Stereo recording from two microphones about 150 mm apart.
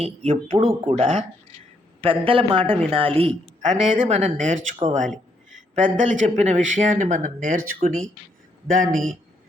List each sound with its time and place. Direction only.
0.0 s speech: 45° right (ahead or behind)
3.6 s speech: 55° right (ahead or behind)